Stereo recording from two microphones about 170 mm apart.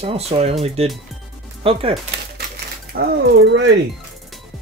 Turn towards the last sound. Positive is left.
turn(degrees=-90)